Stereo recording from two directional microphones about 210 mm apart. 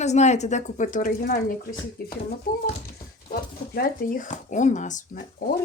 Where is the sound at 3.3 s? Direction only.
40° left (ahead or behind).